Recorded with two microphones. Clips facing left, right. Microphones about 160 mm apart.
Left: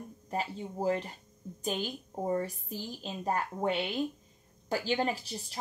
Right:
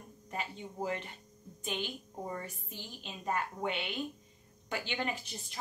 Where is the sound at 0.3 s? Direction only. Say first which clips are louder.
Left 5 dB; 35° left (ahead or behind).